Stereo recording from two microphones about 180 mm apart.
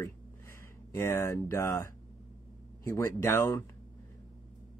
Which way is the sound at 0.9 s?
15° left (ahead or behind).